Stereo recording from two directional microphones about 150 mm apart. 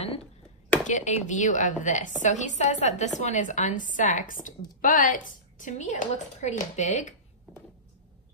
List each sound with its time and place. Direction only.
0.8 s a woman's voice: 55° left (ahead or behind)